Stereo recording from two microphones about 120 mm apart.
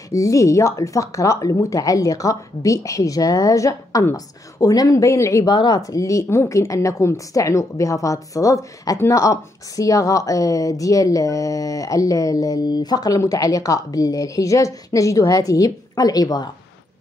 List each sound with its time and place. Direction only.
0.1 s speech: 25° left (ahead or behind)
5.5 s speech: 35° left (ahead or behind)